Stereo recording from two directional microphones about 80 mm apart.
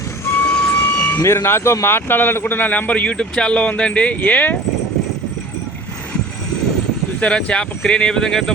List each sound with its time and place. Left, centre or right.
0.3 s vehicle: left
1.2 s a man's voice: left
7.2 s speech: centre